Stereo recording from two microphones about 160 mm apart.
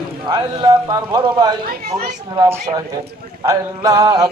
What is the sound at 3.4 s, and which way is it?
Speech, 20° right (ahead or behind).